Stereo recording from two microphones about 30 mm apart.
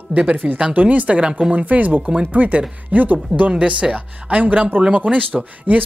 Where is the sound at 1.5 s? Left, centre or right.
Right.